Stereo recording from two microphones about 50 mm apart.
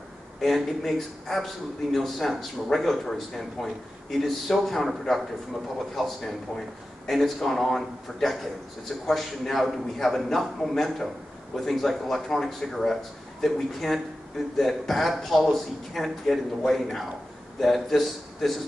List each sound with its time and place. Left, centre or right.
0.4 s a man's voice: centre